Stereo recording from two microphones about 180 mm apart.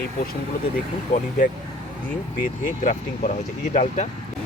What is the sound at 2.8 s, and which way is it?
Speech, 45° left (ahead or behind).